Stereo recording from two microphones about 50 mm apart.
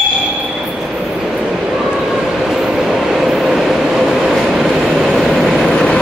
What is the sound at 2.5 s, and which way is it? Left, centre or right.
Train, centre.